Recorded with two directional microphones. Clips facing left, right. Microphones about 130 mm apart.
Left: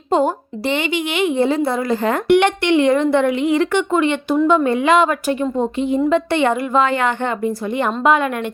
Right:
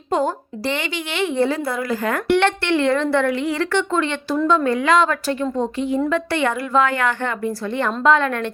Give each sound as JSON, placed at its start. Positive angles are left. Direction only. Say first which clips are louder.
{"t": 0.7, "sound": "a woman's voice", "louder": "left 6 dB", "side_deg": 20}